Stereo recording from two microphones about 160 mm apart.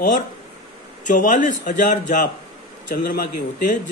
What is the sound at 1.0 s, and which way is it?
Speech, 50° left (ahead or behind).